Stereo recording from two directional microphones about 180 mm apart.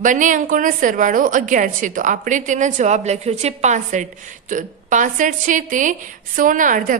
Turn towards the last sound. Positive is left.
turn(degrees=-45)  # may be behind; listen again after turning